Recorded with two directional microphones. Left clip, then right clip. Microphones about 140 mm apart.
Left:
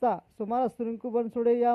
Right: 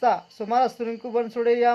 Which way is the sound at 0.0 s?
40° left (ahead or behind).